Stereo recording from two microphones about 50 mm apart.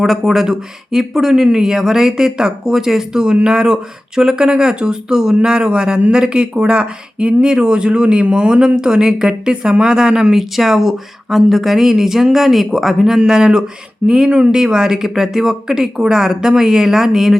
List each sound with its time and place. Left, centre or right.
0.0 s speech: centre
10.3 s speech: centre